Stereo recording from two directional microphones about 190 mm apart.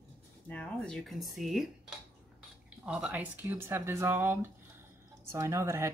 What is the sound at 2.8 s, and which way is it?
Speech, 5° right (ahead or behind).